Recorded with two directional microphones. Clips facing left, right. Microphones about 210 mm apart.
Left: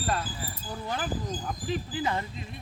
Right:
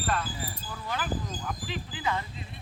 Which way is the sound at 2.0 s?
35° left (ahead or behind).